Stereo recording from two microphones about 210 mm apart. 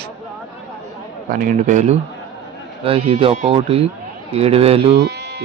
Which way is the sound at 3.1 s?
25° right (ahead or behind).